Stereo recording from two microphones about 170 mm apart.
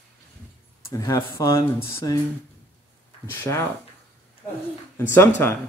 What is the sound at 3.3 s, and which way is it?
Speech, 15° left (ahead or behind).